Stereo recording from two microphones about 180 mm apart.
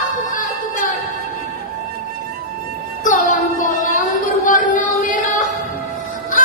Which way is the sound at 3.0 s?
45° left (ahead or behind).